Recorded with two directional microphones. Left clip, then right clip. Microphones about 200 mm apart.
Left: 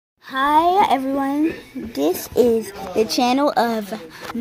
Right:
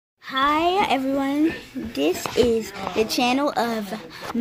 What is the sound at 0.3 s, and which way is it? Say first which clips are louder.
Speech: left 4 dB; centre (ahead or behind).